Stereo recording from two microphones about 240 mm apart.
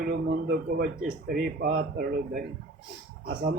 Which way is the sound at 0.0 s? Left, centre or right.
Right.